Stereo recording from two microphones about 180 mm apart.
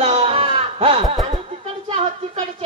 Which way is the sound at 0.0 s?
35° right (ahead or behind).